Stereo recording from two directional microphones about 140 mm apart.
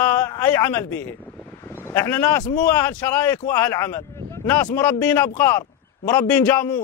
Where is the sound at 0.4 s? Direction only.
15° left (ahead or behind).